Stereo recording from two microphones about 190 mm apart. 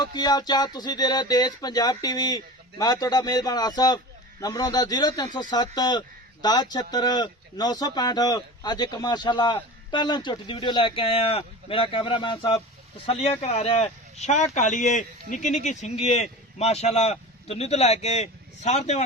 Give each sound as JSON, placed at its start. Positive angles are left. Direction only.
{"t": 0.0, "sound": "speech", "side_deg": 20}